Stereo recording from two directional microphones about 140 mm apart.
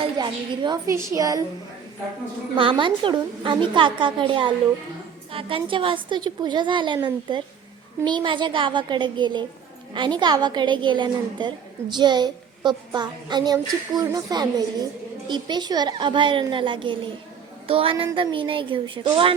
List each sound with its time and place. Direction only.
0.0 s a woman's voice: 35° right (ahead or behind)
0.9 s a woman's voice: 20° right (ahead or behind)
2.6 s a woman's voice: 35° right (ahead or behind)